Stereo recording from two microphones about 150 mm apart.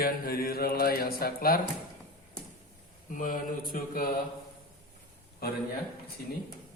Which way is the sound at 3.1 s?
65° left (ahead or behind).